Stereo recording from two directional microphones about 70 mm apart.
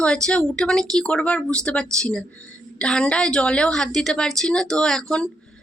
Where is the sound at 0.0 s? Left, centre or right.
Centre.